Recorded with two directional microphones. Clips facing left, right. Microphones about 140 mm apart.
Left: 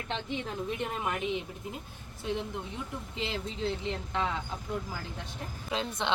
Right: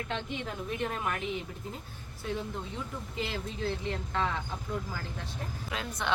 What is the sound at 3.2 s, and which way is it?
Speech, 25° left (ahead or behind).